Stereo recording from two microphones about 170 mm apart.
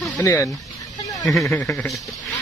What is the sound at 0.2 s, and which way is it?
Speech, 15° left (ahead or behind).